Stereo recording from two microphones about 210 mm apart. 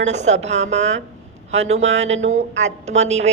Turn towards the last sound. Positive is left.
turn(degrees=-30)  # may be behind; listen again after turning